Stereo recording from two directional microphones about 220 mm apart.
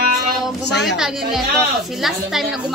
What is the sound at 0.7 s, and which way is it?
Speech, 50° left (ahead or behind).